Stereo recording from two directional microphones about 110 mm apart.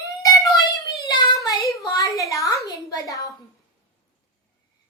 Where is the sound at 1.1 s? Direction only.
35° left (ahead or behind).